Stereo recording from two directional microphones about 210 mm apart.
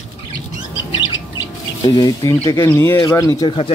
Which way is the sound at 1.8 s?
20° left (ahead or behind).